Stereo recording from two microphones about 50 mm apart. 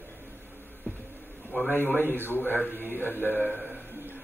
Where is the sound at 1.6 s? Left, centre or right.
Left.